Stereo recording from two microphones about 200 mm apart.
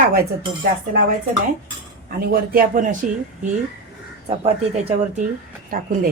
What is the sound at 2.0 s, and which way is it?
Speech, 50° right (ahead or behind).